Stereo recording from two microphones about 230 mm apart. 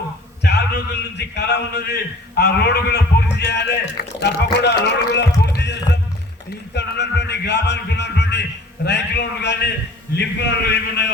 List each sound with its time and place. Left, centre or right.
0.4 s a man's voice: left